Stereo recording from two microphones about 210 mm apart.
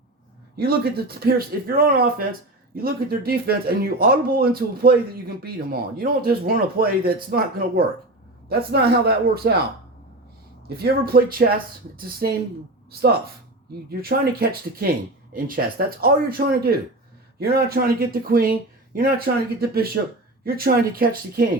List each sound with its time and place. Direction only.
0.5 s speech: 50° right (ahead or behind)
8.4 s speech: 50° right (ahead or behind)
10.7 s speech: 50° right (ahead or behind)